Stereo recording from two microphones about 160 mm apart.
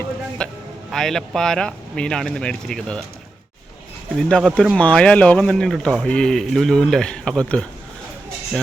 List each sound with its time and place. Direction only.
0.4 s a sound: 5° left (ahead or behind)
0.9 s speech: centre (ahead or behind)
4.2 s speech: centre (ahead or behind)